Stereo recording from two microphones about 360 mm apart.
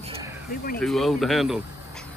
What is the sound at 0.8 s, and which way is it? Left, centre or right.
Speech, centre.